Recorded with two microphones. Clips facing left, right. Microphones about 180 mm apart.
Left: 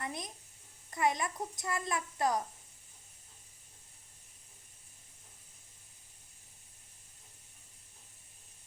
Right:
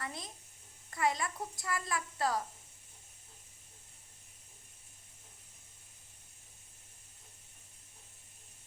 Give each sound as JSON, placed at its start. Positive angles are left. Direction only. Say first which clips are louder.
{"t": 0.0, "sound": "a child's voice", "louder": "left 3 dB", "side_deg": 20}